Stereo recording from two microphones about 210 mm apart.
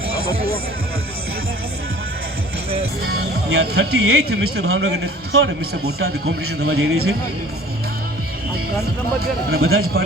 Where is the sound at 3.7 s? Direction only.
75° right (ahead or behind).